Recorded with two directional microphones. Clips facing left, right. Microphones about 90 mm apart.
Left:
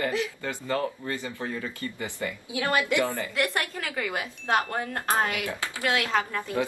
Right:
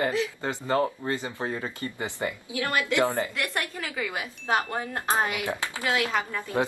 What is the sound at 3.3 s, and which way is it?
Speech, centre (ahead or behind).